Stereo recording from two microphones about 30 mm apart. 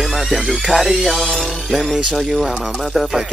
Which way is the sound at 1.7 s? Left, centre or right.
Centre.